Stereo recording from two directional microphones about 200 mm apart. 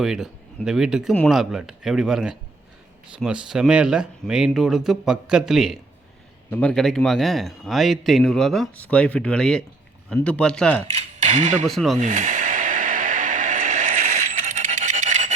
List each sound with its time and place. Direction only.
0.0 s a man's voice: centre (ahead or behind)
10.8 s speech: 35° right (ahead or behind)
11.7 s a man's voice: centre (ahead or behind)
11.9 s music: 40° right (ahead or behind)